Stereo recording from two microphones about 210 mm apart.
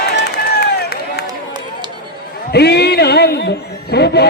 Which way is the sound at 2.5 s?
50° left (ahead or behind).